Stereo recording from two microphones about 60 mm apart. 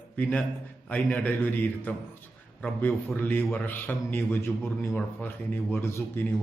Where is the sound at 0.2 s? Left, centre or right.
Left.